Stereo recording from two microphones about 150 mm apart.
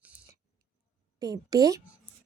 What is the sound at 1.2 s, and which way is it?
Speech, 25° right (ahead or behind).